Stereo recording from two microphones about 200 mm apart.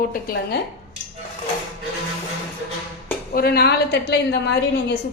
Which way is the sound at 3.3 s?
50° left (ahead or behind).